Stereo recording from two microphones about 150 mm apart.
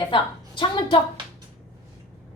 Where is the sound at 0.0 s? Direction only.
35° left (ahead or behind).